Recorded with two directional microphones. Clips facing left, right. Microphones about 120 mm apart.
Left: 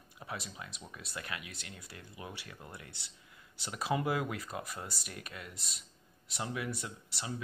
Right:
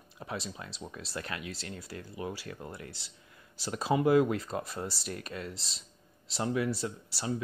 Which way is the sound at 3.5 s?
30° right (ahead or behind).